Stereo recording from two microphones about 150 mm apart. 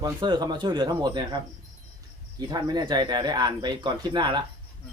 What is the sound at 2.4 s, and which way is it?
Speech, 25° right (ahead or behind).